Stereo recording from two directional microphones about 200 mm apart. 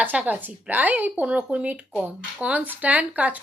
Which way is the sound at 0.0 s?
5° right (ahead or behind).